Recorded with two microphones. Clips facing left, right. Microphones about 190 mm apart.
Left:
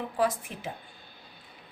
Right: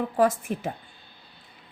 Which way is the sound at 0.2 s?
45° right (ahead or behind).